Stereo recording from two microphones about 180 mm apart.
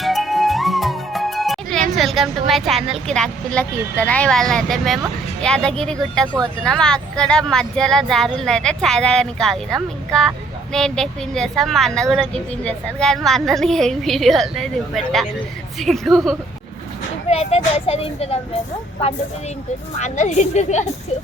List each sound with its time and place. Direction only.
0.0 s music: centre (ahead or behind)
2.0 s speech: centre (ahead or behind)
17.2 s a child's voice: 35° left (ahead or behind)
20.0 s a child's voice: 40° left (ahead or behind)